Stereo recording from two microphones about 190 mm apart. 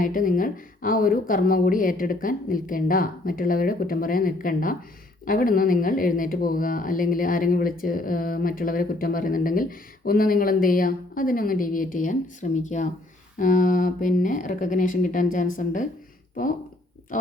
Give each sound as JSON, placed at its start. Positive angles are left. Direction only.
{"t": 0.0, "sound": "speech", "side_deg": 45}
{"t": 17.1, "sound": "speech", "side_deg": 45}